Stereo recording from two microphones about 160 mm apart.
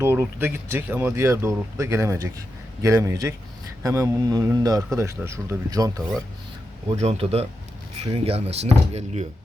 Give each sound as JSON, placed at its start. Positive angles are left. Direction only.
{"t": 0.0, "sound": "a man's voice", "side_deg": -15}
{"t": 7.0, "sound": "speech", "side_deg": -40}